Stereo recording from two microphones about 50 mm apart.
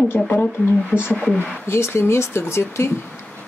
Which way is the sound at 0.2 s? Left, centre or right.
Left.